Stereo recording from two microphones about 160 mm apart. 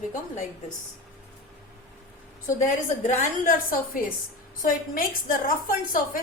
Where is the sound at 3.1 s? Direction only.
60° left (ahead or behind).